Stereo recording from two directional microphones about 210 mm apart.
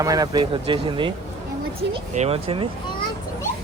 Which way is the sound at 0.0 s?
15° right (ahead or behind).